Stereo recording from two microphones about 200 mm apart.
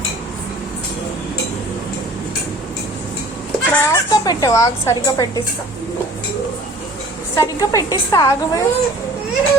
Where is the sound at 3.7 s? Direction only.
15° left (ahead or behind).